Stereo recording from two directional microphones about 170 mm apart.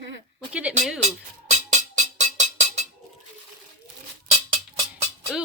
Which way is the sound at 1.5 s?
45° right (ahead or behind).